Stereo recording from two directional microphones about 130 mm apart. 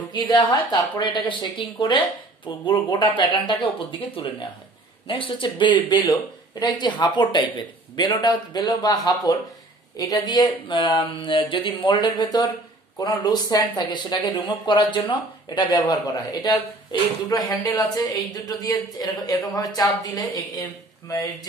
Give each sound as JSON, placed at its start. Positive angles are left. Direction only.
{"t": 0.1, "sound": "speech", "side_deg": 35}
{"t": 5.0, "sound": "a woman's voice", "side_deg": 40}